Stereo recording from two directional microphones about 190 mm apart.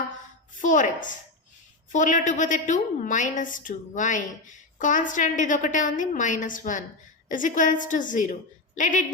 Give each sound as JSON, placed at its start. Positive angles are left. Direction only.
{"t": 0.5, "sound": "a woman's voice", "side_deg": 45}